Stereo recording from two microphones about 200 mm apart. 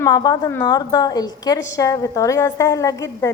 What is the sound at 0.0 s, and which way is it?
A woman's voice, 20° left (ahead or behind).